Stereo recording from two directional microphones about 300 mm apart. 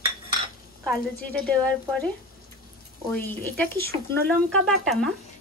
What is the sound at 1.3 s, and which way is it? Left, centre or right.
Speech, centre.